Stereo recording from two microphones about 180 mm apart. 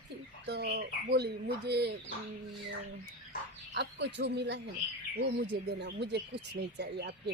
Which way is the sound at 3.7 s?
70° right (ahead or behind).